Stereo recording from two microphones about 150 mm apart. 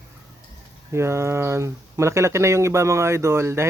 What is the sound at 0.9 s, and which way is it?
Speech, 15° right (ahead or behind).